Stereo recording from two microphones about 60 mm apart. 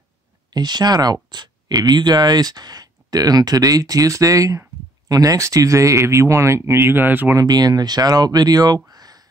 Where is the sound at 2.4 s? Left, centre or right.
Right.